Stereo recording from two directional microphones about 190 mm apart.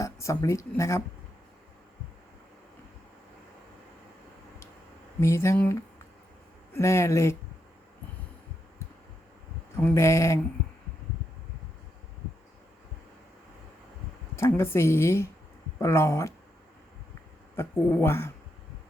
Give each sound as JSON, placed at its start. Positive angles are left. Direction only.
{"t": 0.0, "sound": "speech", "side_deg": 15}
{"t": 5.2, "sound": "speech", "side_deg": 15}
{"t": 6.7, "sound": "speech", "side_deg": 15}
{"t": 9.7, "sound": "speech", "side_deg": 15}
{"t": 14.3, "sound": "speech", "side_deg": 15}
{"t": 17.6, "sound": "speech", "side_deg": 15}